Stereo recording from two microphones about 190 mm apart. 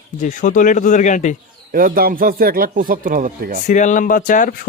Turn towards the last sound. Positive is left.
turn(degrees=45)  # may be behind; listen again after turning